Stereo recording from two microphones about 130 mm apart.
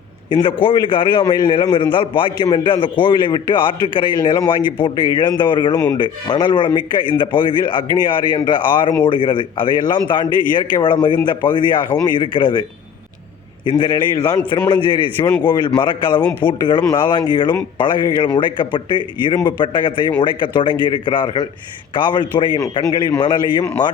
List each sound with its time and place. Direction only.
0.3 s a man's voice: 40° left (ahead or behind)
5.7 s speech: 20° left (ahead or behind)
6.0 s a man's voice: 35° left (ahead or behind)
13.7 s a man's voice: 40° left (ahead or behind)